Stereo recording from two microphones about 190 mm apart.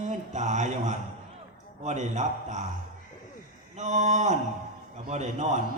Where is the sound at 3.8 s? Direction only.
40° right (ahead or behind).